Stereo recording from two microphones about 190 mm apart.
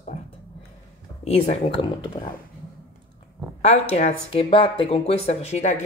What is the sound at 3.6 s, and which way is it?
Speech, 35° left (ahead or behind).